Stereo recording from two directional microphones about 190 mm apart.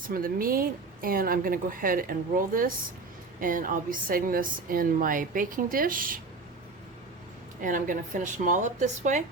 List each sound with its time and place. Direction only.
0.1 s a woman's voice: 50° right (ahead or behind)
7.6 s speech: 45° right (ahead or behind)